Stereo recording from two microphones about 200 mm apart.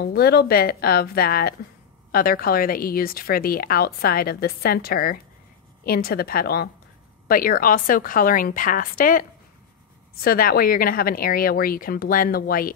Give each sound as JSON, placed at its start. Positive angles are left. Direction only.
{"t": 0.0, "sound": "speech", "side_deg": 50}
{"t": 10.2, "sound": "speech", "side_deg": 50}